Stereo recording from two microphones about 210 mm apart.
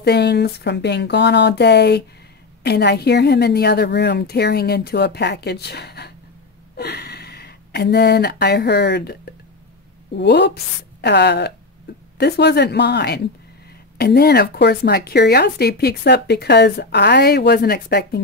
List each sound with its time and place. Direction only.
0.0 s a woman's voice: 50° left (ahead or behind)